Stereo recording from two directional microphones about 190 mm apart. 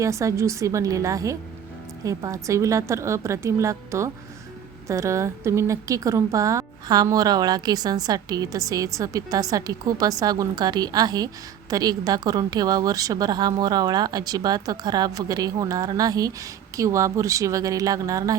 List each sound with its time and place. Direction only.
0.0 s a woman's voice: 15° right (ahead or behind)